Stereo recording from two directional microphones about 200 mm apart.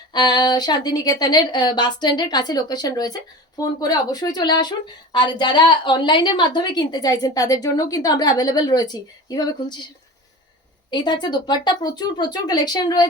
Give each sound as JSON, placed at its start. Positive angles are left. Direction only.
{"t": 0.1, "sound": "a woman's voice", "side_deg": 20}
{"t": 10.9, "sound": "a woman's voice", "side_deg": 20}